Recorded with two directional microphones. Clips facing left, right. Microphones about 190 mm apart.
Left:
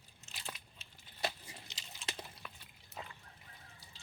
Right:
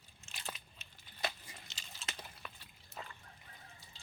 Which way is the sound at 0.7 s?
30° left (ahead or behind).